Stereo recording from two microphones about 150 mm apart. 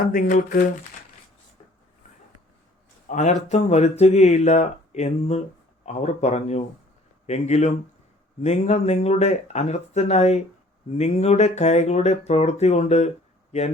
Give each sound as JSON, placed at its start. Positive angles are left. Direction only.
{"t": 0.0, "sound": "speech", "side_deg": 70}
{"t": 3.1, "sound": "speech", "side_deg": 55}